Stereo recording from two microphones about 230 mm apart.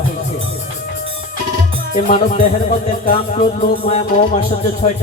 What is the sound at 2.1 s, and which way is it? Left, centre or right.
Speech, left.